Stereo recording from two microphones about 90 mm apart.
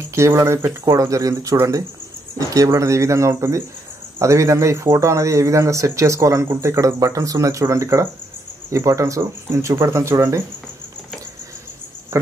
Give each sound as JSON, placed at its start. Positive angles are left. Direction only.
{"t": 0.0, "sound": "a man's voice", "side_deg": -30}
{"t": 12.1, "sound": "speech", "side_deg": -30}